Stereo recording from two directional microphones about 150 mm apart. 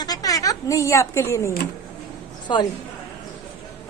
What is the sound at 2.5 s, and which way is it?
Speech, 30° left (ahead or behind).